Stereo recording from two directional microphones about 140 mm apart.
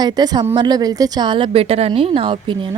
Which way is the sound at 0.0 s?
30° right (ahead or behind).